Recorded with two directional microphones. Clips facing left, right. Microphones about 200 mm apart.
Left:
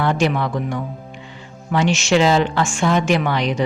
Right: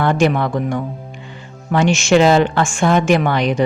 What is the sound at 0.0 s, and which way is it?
A woman's voice, 50° right (ahead or behind).